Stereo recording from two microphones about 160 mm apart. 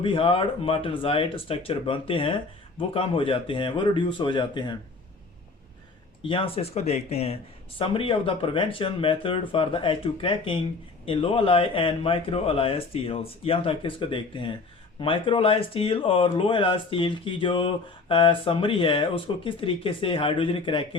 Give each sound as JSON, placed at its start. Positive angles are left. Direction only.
{"t": 0.0, "sound": "speech", "side_deg": 35}
{"t": 6.2, "sound": "speech", "side_deg": 35}